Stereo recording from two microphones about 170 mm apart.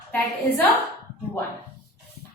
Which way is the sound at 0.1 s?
10° left (ahead or behind).